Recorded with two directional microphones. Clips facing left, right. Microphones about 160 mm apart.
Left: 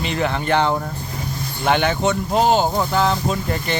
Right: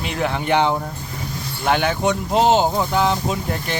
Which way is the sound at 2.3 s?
20° right (ahead or behind).